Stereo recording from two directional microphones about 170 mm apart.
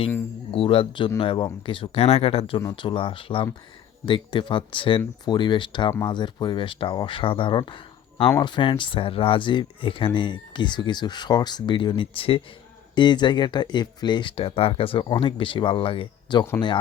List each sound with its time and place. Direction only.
0.5 s speech: 35° left (ahead or behind)